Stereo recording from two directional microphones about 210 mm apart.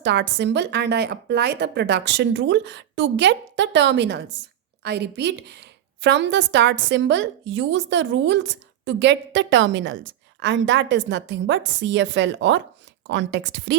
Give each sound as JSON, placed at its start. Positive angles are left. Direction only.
{"t": 0.0, "sound": "a woman's voice", "side_deg": -55}